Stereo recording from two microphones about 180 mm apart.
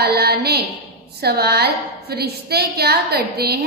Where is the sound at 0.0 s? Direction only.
60° right (ahead or behind).